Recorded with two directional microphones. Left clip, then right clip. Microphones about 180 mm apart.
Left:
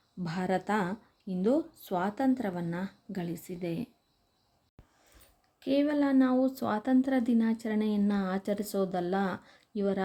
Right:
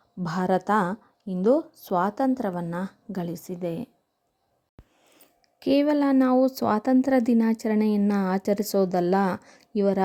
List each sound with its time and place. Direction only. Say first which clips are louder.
0.2 s a woman's voice: right 7 dB; 35° right (ahead or behind)
5.5 s speech: right 6 dB; 45° right (ahead or behind)